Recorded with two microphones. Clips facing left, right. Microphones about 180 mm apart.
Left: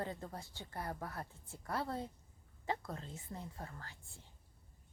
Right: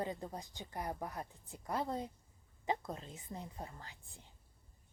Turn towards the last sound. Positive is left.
turn(degrees=-15)  # may be behind; listen again after turning